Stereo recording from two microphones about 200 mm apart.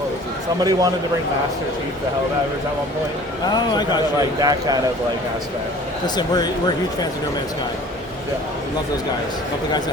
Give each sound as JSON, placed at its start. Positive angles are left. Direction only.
{"t": 0.6, "sound": "speech", "side_deg": -20}
{"t": 3.5, "sound": "speech", "side_deg": 20}
{"t": 4.4, "sound": "speech", "side_deg": -20}
{"t": 6.1, "sound": "speech", "side_deg": 20}